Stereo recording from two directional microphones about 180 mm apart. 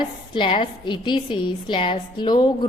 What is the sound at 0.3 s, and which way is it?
A woman's voice, 30° left (ahead or behind).